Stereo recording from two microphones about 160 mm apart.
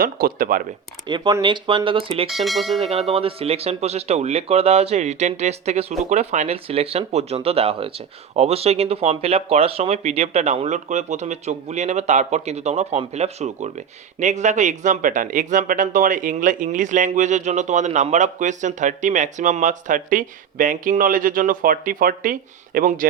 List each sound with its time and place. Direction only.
0.0 s speech: 65° right (ahead or behind)
1.0 s speech: 25° right (ahead or behind)
2.3 s speech: centre (ahead or behind)
2.8 s speech: 40° right (ahead or behind); by 23.0 s 60° right (ahead or behind)